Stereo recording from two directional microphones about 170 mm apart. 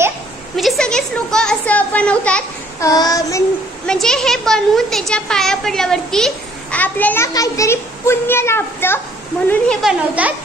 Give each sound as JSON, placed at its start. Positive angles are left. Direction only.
{"t": 0.6, "sound": "a child's voice", "side_deg": 0}
{"t": 2.8, "sound": "child singing", "side_deg": 20}
{"t": 3.8, "sound": "a child's voice", "side_deg": 5}
{"t": 9.5, "sound": "a child's voice", "side_deg": 0}